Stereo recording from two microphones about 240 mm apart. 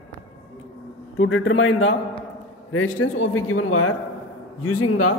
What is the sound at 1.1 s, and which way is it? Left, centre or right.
Speech, left.